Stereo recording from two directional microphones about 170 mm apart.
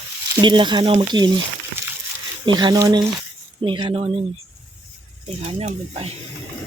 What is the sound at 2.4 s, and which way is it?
Speech, 25° right (ahead or behind).